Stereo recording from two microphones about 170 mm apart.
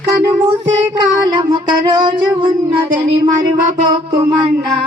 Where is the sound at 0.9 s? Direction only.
25° right (ahead or behind).